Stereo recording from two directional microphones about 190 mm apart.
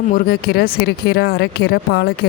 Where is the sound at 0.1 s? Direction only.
55° left (ahead or behind).